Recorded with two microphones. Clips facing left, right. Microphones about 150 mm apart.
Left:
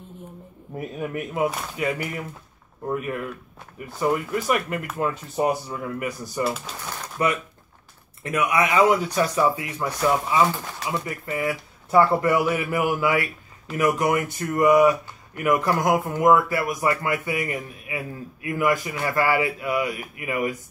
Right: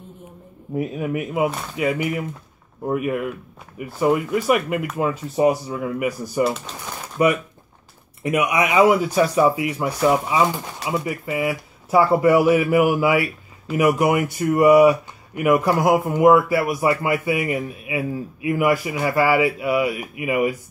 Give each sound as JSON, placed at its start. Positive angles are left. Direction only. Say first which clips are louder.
{"t": 0.7, "sound": "speech", "louder": "right 5 dB", "side_deg": -5}
{"t": 7.0, "sound": "a sound", "louder": "right 6 dB", "side_deg": -10}
{"t": 8.2, "sound": "speech", "louder": "right 2 dB", "side_deg": -15}
{"t": 12.1, "sound": "speech", "louder": "right 6 dB", "side_deg": -15}
{"t": 14.4, "sound": "a man's voice", "louder": "right 4 dB", "side_deg": -20}
{"t": 16.2, "sound": "speech", "louder": "right 4 dB", "side_deg": -5}
{"t": 16.5, "sound": "a man's voice", "louder": "right 4 dB", "side_deg": -25}